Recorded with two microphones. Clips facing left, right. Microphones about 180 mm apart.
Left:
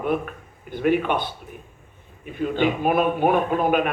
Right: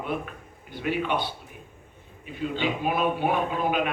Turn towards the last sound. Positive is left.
turn(degrees=50)  # may be behind; listen again after turning